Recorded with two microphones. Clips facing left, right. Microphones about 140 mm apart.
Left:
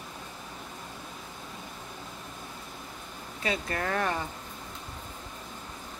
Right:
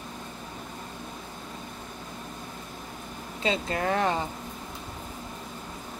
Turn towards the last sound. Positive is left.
turn(degrees=-20)  # may be behind; listen again after turning